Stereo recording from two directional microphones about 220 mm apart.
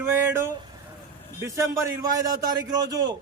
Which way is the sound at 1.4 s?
15° right (ahead or behind).